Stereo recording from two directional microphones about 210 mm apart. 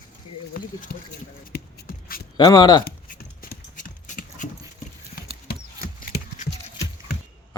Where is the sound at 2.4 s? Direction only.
20° left (ahead or behind).